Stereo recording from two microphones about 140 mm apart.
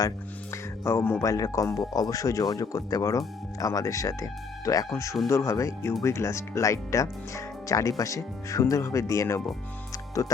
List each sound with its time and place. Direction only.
0.5 s speech: 20° left (ahead or behind)